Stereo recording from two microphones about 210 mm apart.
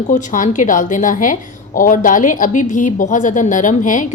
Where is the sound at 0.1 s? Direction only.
35° left (ahead or behind).